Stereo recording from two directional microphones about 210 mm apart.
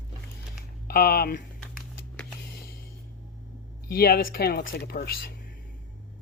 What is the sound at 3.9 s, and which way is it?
Speech, 45° left (ahead or behind).